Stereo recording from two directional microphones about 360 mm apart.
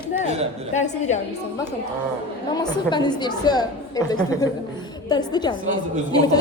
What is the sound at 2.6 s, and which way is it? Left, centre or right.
A woman's voice, centre.